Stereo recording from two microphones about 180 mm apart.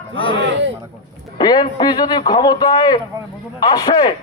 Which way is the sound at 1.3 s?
25° left (ahead or behind).